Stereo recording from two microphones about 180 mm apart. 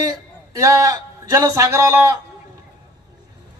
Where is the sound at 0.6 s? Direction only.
15° right (ahead or behind).